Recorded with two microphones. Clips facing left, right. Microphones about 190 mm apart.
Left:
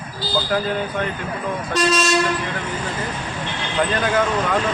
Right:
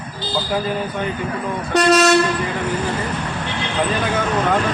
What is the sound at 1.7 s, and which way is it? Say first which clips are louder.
Train: right 6 dB; 65° right (ahead or behind).